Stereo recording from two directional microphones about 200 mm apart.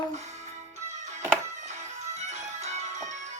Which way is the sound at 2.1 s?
35° right (ahead or behind).